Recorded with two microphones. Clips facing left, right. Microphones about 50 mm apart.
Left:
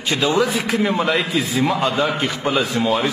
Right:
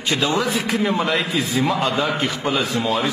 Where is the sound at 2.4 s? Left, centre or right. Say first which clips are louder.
Left 3 dB; centre.